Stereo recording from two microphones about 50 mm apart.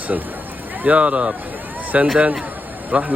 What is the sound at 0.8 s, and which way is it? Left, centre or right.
Speech, right.